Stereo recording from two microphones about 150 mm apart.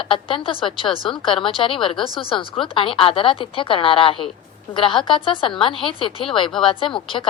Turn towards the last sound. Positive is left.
turn(degrees=35)  # may be behind; listen again after turning